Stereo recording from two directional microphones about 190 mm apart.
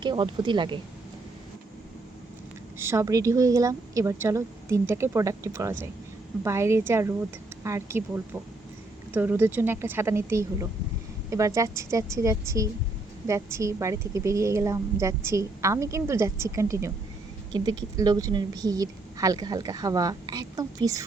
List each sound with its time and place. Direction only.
0.0 s a woman's voice: 25° right (ahead or behind)
2.7 s a woman's voice: 15° right (ahead or behind)